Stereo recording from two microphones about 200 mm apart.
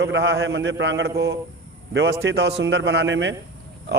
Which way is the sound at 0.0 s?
65° right (ahead or behind).